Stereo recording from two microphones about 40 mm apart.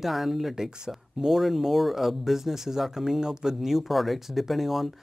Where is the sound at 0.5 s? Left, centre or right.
Centre.